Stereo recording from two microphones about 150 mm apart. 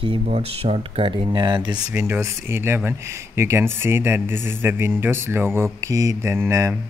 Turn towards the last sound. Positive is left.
turn(degrees=-20)  # may be behind; listen again after turning